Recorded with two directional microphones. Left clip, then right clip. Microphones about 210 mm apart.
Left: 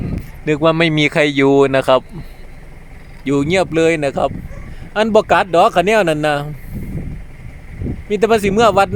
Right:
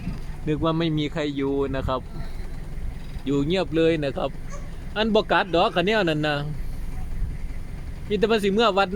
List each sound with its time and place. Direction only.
0.4 s speech: 25° left (ahead or behind)
3.2 s speech: 35° left (ahead or behind)
8.1 s speech: 35° left (ahead or behind)